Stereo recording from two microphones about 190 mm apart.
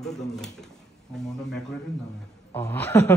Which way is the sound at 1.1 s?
Centre (ahead or behind).